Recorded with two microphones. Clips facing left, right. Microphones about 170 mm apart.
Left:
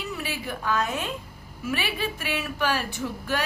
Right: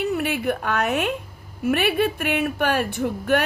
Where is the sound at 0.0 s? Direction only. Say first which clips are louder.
Right 10 dB; 60° right (ahead or behind).